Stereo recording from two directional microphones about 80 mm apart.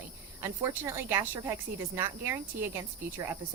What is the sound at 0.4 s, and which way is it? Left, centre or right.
A woman's voice, right.